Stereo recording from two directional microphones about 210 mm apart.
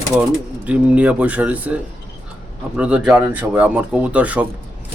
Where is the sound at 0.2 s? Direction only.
5° right (ahead or behind).